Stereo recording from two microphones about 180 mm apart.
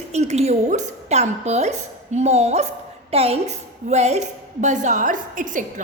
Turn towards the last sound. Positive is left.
turn(degrees=-45)  # may be behind; listen again after turning